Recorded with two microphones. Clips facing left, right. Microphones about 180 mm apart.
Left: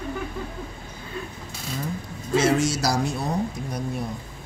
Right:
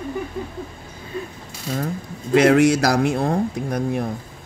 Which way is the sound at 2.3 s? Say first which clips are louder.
Right 7 dB; 65° right (ahead or behind).